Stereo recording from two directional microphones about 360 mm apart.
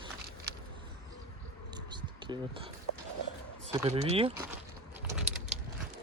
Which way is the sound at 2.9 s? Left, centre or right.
Left.